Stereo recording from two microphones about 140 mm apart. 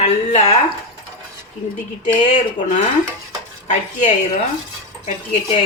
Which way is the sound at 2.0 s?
60° left (ahead or behind).